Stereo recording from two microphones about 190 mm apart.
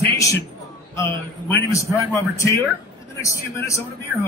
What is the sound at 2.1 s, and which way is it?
Speech, 15° left (ahead or behind).